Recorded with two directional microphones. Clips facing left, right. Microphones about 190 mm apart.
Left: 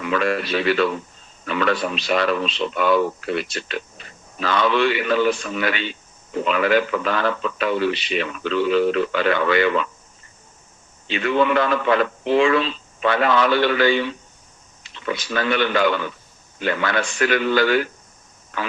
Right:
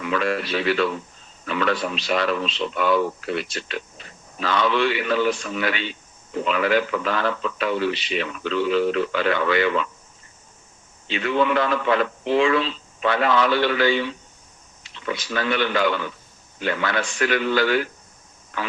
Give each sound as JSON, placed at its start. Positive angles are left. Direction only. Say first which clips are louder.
{"t": 0.0, "sound": "speech", "louder": "left 2 dB", "side_deg": 60}
{"t": 11.1, "sound": "speech", "louder": "left 2 dB", "side_deg": 60}